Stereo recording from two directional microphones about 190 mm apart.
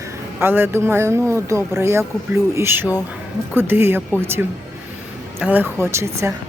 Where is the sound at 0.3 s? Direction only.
10° right (ahead or behind).